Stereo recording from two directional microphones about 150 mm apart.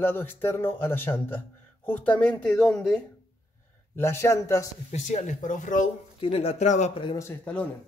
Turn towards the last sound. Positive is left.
turn(degrees=10)  # may be behind; listen again after turning